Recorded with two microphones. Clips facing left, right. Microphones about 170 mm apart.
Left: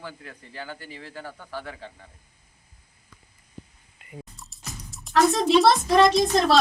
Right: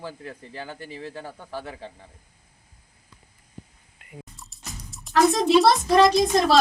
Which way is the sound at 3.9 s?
Centre (ahead or behind).